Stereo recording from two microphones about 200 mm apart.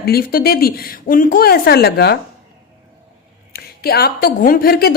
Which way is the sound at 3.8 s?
50° left (ahead or behind).